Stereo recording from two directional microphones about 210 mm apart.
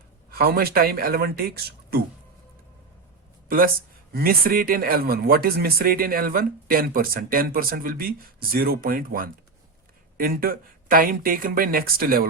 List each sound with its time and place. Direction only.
0.3 s speech: 45° right (ahead or behind)
4.1 s speech: 45° right (ahead or behind)